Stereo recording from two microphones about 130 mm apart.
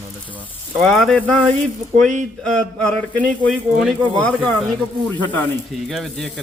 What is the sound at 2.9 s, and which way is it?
Speech, 10° left (ahead or behind).